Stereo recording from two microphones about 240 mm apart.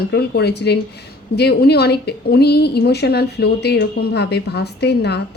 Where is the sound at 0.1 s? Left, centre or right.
Left.